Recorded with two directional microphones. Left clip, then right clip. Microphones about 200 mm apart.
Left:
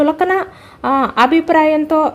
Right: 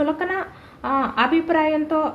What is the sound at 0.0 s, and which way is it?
A woman's voice, 55° left (ahead or behind).